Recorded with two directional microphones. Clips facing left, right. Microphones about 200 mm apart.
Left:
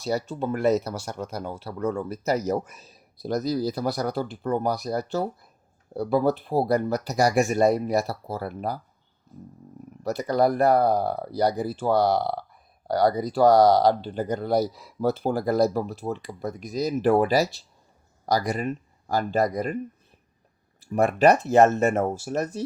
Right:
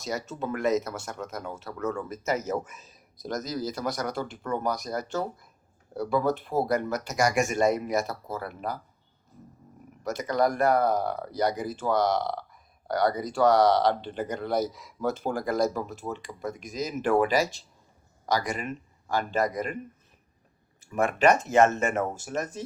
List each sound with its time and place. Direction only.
0.0 s speech: 35° left (ahead or behind)
10.0 s speech: 35° left (ahead or behind)
20.8 s speech: 35° left (ahead or behind)